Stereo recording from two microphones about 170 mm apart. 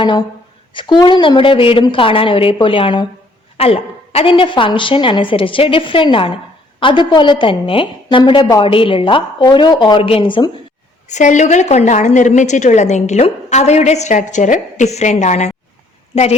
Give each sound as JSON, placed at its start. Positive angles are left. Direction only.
{"t": 0.0, "sound": "a woman's voice", "side_deg": 25}
{"t": 11.1, "sound": "a woman's voice", "side_deg": 45}